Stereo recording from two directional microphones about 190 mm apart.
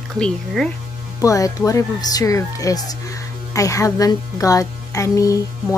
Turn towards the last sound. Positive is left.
turn(degrees=15)  # may be behind; listen again after turning